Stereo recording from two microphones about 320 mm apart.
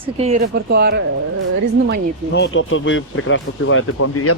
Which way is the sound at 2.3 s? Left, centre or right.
Left.